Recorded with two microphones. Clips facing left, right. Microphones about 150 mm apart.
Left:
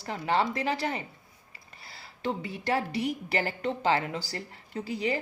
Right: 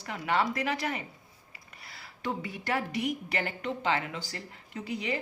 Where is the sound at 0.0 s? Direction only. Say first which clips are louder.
Left 2 dB; 30° left (ahead or behind).